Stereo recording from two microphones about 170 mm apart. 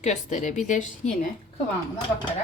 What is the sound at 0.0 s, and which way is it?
Speech, 45° left (ahead or behind).